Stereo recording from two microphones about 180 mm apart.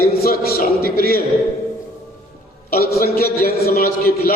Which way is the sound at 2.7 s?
55° left (ahead or behind).